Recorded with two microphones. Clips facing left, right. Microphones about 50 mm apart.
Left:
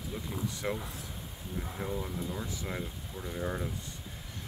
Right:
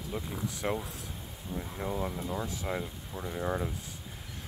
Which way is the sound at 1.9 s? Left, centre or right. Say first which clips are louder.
Right 4 dB; right.